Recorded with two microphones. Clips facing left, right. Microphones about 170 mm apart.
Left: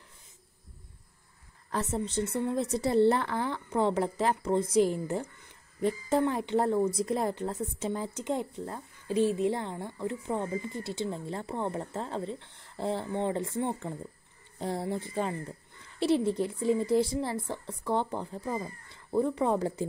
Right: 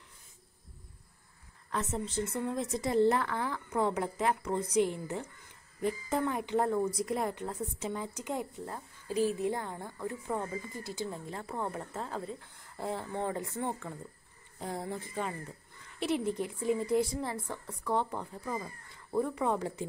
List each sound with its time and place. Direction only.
1.7 s a woman's voice: 35° left (ahead or behind)